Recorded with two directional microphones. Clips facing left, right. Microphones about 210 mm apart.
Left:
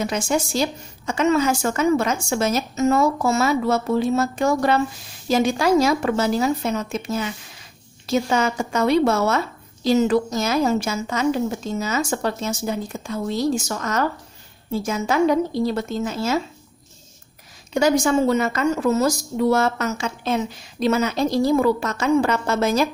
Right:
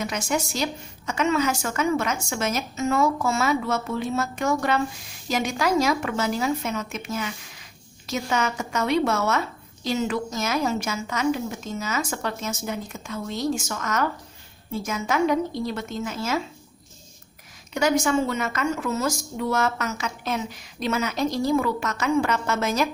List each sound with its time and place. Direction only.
0.3 s a woman's voice: 30° left (ahead or behind)
17.7 s a woman's voice: 30° left (ahead or behind)